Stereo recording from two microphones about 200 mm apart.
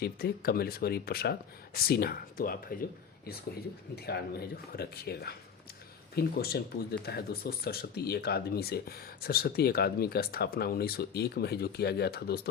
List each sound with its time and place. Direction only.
0.0 s speech: 50° left (ahead or behind)
3.9 s speech: 50° left (ahead or behind)